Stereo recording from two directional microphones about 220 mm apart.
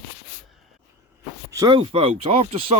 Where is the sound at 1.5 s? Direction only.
20° right (ahead or behind).